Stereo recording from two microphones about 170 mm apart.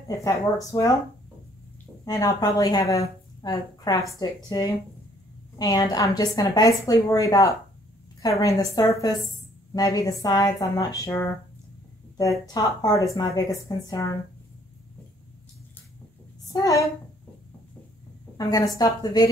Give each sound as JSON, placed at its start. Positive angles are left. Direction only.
{"t": 0.1, "sound": "speech", "side_deg": 20}
{"t": 2.0, "sound": "speech", "side_deg": 20}
{"t": 16.5, "sound": "speech", "side_deg": 20}
{"t": 18.4, "sound": "speech", "side_deg": 20}